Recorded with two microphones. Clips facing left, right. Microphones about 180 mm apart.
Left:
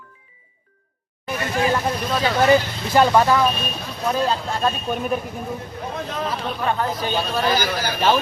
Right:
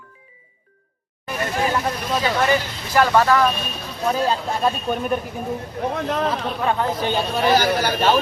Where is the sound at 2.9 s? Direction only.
20° left (ahead or behind).